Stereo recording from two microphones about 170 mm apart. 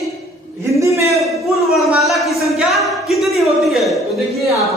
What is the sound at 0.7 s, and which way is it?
Speech, 20° right (ahead or behind).